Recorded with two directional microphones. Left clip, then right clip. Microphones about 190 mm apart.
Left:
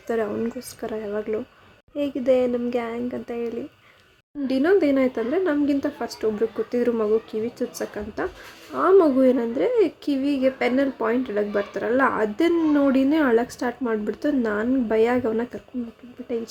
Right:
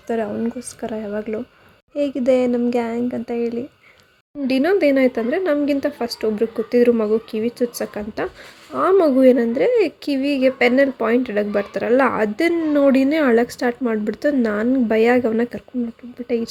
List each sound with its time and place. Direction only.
0.1 s a woman's voice: 5° right (ahead or behind)